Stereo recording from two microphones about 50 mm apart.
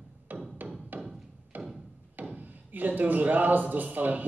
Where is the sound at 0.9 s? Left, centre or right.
Right.